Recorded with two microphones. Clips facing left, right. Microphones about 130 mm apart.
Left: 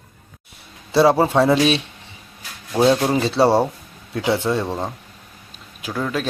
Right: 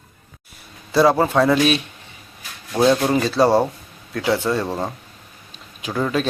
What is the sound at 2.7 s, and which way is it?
A man's voice, 10° left (ahead or behind).